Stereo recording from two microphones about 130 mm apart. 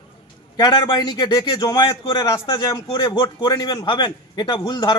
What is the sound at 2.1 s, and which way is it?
A man's voice, 25° left (ahead or behind).